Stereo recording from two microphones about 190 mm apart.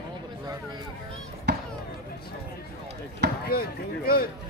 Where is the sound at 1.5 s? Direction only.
65° right (ahead or behind).